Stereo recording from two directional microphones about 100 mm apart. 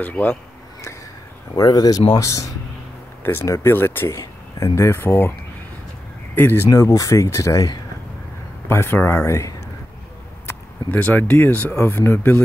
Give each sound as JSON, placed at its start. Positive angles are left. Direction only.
{"t": 0.0, "sound": "speech", "side_deg": 15}
{"t": 1.5, "sound": "speech", "side_deg": 40}
{"t": 6.3, "sound": "speech", "side_deg": 20}
{"t": 6.7, "sound": "speech", "side_deg": 35}
{"t": 8.6, "sound": "speech", "side_deg": 25}